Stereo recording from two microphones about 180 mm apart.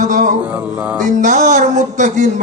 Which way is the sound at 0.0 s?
45° right (ahead or behind).